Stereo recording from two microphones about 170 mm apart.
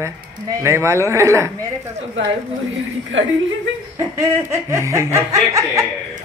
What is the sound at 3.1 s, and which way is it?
Speech, 90° right.